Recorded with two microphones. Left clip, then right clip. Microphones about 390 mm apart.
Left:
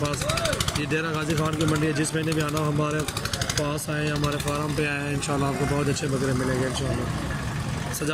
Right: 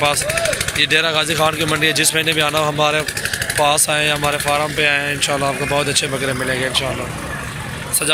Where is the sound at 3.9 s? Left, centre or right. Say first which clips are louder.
Right 11 dB; right.